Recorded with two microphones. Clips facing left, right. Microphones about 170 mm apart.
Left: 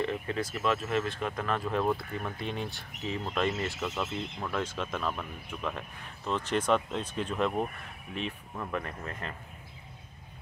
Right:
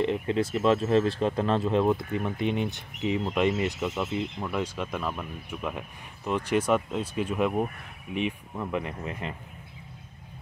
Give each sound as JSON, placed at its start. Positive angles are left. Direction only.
{"t": 0.0, "sound": "speech", "side_deg": -25}